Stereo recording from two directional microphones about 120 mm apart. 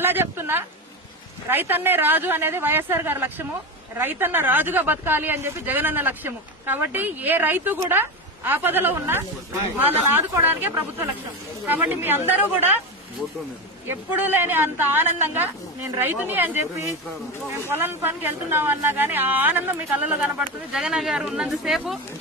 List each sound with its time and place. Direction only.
0.0 s speech: 20° right (ahead or behind)
13.8 s speech: 20° right (ahead or behind)